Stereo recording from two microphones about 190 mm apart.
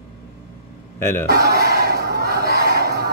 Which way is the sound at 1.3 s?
55° right (ahead or behind).